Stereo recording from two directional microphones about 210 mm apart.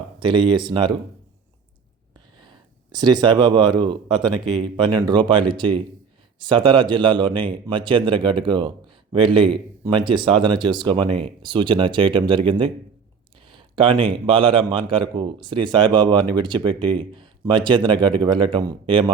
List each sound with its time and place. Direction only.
0.2 s speech: 25° right (ahead or behind)
2.9 s speech: 20° right (ahead or behind)